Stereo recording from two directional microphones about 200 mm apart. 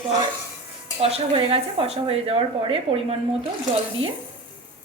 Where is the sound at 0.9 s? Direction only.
30° right (ahead or behind).